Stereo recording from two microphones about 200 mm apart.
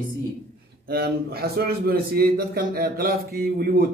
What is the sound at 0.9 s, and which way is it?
A man's voice, 50° right (ahead or behind).